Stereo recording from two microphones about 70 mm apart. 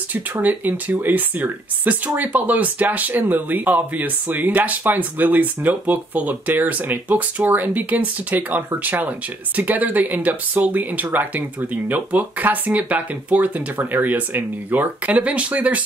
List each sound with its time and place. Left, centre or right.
0.1 s speech: right